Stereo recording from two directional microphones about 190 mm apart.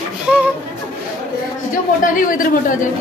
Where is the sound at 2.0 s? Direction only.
45° left (ahead or behind).